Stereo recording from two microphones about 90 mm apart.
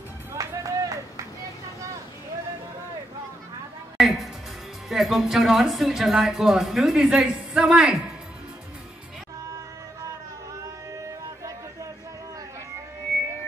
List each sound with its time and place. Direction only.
0.4 s run: 40° right (ahead or behind)
4.0 s a woman's voice: centre (ahead or behind)
10.6 s music: 35° right (ahead or behind)